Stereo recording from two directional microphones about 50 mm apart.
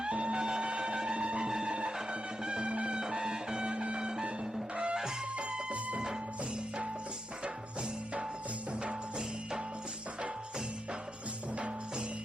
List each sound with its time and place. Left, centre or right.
0.0 s music: right
7.4 s music: right
11.5 s music: right